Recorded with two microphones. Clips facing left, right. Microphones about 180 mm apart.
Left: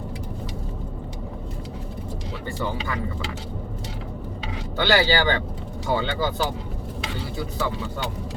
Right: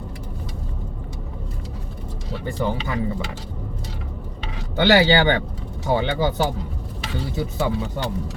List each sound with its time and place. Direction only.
2.5 s speech: 15° right (ahead or behind)
4.8 s speech: 20° right (ahead or behind)